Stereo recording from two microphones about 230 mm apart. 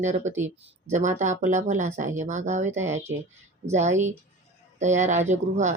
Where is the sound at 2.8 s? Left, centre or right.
Centre.